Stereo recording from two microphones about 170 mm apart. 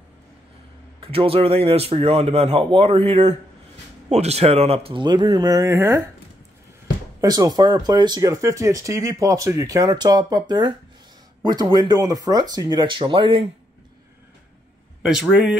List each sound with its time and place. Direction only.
1.0 s speech: 35° right (ahead or behind); by 6.0 s 15° right (ahead or behind)
7.2 s speech: 20° right (ahead or behind)
15.0 s speech: 5° right (ahead or behind)